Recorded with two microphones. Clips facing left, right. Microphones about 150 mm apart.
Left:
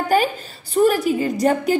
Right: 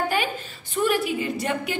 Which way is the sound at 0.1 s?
40° left (ahead or behind).